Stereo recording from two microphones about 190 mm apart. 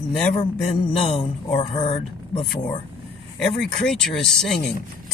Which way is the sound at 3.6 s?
5° left (ahead or behind).